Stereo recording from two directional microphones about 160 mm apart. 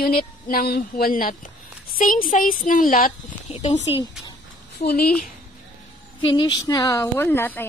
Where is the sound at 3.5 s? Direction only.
45° left (ahead or behind).